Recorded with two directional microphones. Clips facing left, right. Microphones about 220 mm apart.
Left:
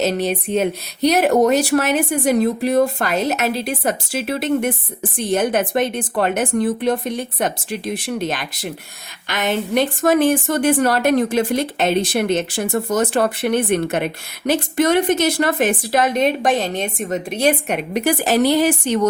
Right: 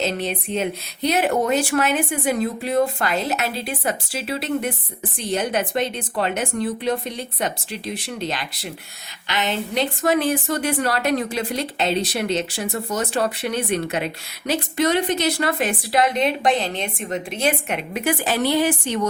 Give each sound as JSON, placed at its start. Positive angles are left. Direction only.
{"t": 0.0, "sound": "a woman's voice", "side_deg": 45}